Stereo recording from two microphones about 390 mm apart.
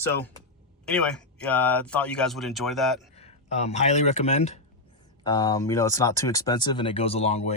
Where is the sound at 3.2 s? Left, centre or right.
Centre.